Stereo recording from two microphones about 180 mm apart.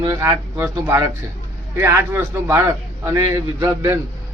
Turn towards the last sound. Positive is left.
turn(degrees=-15)  # may be behind; listen again after turning